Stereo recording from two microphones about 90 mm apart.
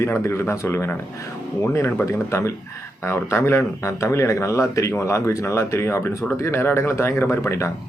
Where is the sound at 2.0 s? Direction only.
30° left (ahead or behind).